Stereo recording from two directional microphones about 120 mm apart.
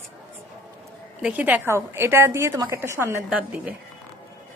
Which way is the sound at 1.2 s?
10° right (ahead or behind).